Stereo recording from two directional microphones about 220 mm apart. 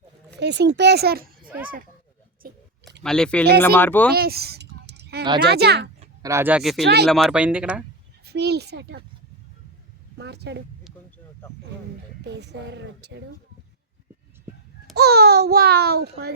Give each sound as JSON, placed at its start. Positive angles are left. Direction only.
{"t": 0.3, "sound": "a child's voice", "side_deg": -50}
{"t": 1.5, "sound": "speech", "side_deg": -5}
{"t": 2.4, "sound": "speech", "side_deg": -40}
{"t": 3.0, "sound": "speech", "side_deg": 5}
{"t": 4.1, "sound": "a sound", "side_deg": -45}
{"t": 5.4, "sound": "a child's voice", "side_deg": -45}
{"t": 6.2, "sound": "speech", "side_deg": -10}
{"t": 6.8, "sound": "a child's voice", "side_deg": -50}
{"t": 7.1, "sound": "speech", "side_deg": 0}
{"t": 8.2, "sound": "speech", "side_deg": -50}
{"t": 10.2, "sound": "a child's voice", "side_deg": -50}
{"t": 12.2, "sound": "a child's voice", "side_deg": -50}
{"t": 14.9, "sound": "a child's voice", "side_deg": -45}